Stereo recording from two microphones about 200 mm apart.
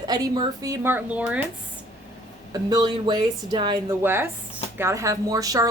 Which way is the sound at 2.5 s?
20° right (ahead or behind).